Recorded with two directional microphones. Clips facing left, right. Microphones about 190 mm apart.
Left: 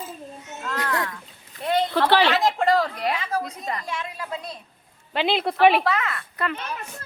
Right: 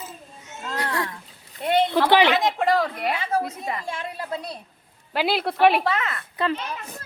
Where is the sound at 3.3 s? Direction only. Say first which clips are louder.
Right 3 dB; 25° right (ahead or behind).